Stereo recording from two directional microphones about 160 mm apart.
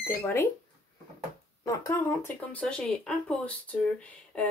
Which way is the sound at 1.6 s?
20° left (ahead or behind).